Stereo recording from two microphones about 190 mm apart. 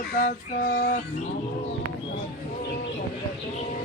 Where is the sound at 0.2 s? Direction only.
50° left (ahead or behind).